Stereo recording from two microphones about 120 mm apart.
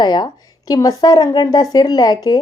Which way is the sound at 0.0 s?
35° left (ahead or behind).